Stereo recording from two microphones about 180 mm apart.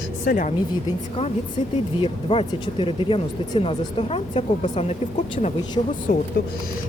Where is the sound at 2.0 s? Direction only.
30° left (ahead or behind).